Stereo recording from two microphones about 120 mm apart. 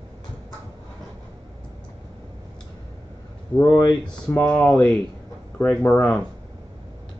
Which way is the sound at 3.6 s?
35° left (ahead or behind).